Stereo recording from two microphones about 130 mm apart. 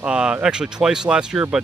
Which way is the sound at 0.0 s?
5° right (ahead or behind).